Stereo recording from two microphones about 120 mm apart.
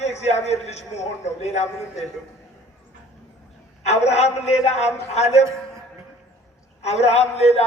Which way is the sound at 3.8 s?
65° left (ahead or behind).